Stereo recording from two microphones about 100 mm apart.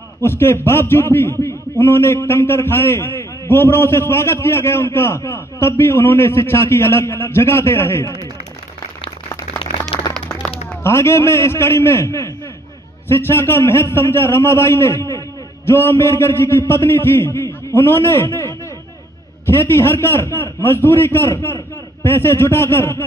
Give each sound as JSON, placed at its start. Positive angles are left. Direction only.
{"t": 0.2, "sound": "a man's voice", "side_deg": 25}
{"t": 10.8, "sound": "a man's voice", "side_deg": 25}